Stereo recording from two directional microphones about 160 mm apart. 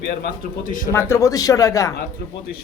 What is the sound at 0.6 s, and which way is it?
Speech, 55° left (ahead or behind).